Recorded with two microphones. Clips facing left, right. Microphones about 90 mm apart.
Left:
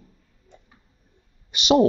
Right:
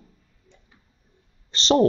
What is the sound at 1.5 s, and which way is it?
Speech, 10° left (ahead or behind).